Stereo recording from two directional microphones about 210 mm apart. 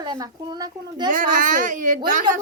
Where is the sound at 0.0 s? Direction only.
20° right (ahead or behind).